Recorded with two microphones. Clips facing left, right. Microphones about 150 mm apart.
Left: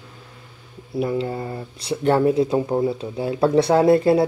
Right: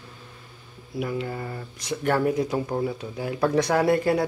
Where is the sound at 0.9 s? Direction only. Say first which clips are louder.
Left 6 dB; 30° left (ahead or behind).